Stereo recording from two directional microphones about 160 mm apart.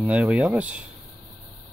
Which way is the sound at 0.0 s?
10° right (ahead or behind).